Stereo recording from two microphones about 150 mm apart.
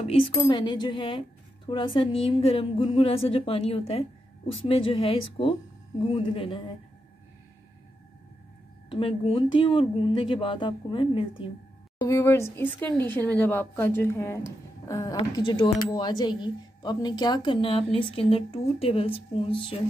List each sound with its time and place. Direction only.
0.0 s music: 40° left (ahead or behind)
0.5 s a woman's voice: 30° left (ahead or behind)
8.8 s a woman's voice: 35° left (ahead or behind)
12.0 s a woman's voice: 20° left (ahead or behind); by 19.8 s 35° left (ahead or behind)